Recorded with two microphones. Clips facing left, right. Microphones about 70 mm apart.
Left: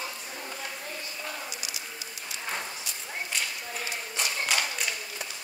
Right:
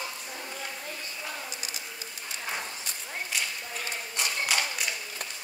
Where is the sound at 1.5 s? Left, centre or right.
Right.